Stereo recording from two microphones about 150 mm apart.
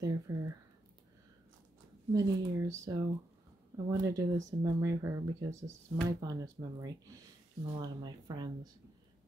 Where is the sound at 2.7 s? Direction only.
20° right (ahead or behind).